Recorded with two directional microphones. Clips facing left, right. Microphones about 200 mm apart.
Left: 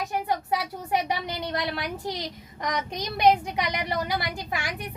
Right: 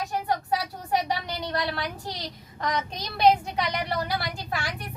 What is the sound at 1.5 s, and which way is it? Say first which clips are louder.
A woman's voice: right 1 dB; 20° left (ahead or behind).